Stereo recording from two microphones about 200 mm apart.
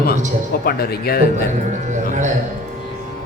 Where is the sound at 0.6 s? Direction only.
50° left (ahead or behind).